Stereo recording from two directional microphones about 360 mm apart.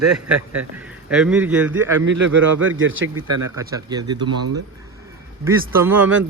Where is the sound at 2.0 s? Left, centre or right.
Right.